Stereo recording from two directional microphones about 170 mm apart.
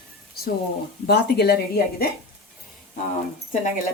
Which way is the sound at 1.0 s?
70° left (ahead or behind).